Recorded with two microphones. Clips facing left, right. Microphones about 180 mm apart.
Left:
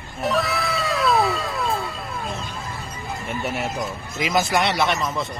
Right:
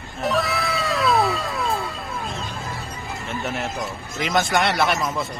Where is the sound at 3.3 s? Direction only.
5° left (ahead or behind).